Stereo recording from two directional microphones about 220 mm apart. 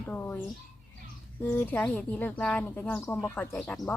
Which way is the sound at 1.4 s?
5° left (ahead or behind).